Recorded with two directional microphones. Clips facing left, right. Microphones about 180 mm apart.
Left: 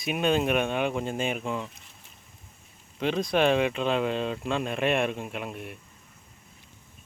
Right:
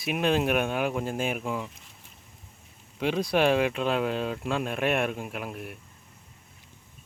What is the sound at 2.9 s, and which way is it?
Speech, 5° right (ahead or behind).